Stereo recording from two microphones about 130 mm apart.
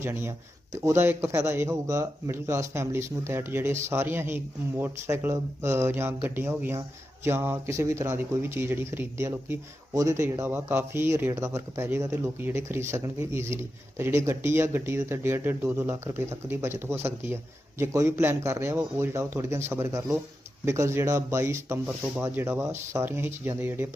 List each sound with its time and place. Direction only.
0.0 s a man's voice: 20° right (ahead or behind)